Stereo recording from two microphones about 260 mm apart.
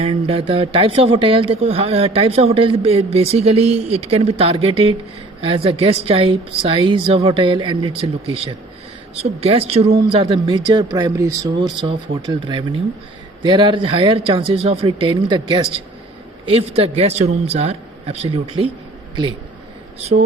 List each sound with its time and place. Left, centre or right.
0.0 s speech: right
20.0 s speech: right